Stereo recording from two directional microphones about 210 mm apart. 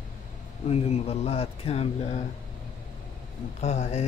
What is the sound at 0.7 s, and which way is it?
Speech, 30° left (ahead or behind).